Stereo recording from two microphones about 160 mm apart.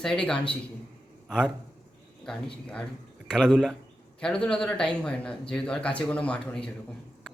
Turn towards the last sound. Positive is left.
turn(degrees=5)  # may be behind; listen again after turning